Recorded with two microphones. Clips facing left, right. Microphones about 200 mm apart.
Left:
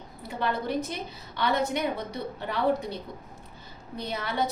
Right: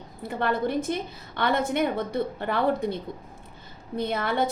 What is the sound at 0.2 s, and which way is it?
A woman's voice, 55° right (ahead or behind).